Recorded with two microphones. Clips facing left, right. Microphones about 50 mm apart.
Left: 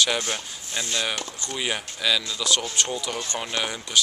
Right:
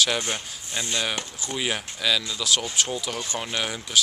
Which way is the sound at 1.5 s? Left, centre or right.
Centre.